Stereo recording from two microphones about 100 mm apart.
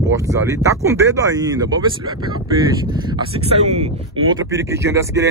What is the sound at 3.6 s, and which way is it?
Speech, 90° right.